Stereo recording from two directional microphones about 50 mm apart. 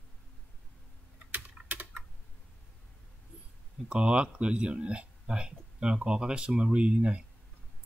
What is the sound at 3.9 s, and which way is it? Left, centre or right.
Speech, centre.